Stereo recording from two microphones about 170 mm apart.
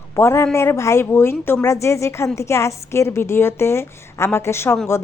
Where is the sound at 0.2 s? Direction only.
15° left (ahead or behind).